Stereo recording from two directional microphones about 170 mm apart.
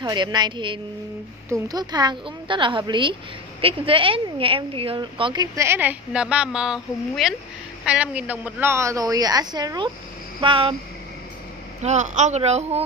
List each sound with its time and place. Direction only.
0.0 s a woman's voice: 25° right (ahead or behind)
5.7 s a woman's voice: 10° right (ahead or behind); by 10.8 s 30° right (ahead or behind)
11.8 s speech: 45° right (ahead or behind)